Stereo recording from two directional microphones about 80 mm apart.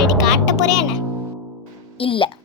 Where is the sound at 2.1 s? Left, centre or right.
Left.